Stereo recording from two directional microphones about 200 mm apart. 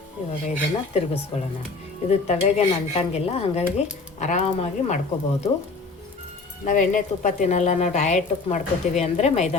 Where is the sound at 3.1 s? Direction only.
30° left (ahead or behind).